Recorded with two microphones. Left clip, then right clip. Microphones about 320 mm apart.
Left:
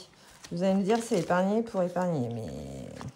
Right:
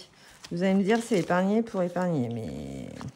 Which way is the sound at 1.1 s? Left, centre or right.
Centre.